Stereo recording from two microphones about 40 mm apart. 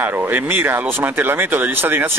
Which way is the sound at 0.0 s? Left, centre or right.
Right.